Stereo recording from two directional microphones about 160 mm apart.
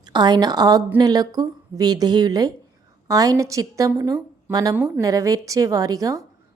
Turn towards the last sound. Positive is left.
turn(degrees=-20)  # may be behind; listen again after turning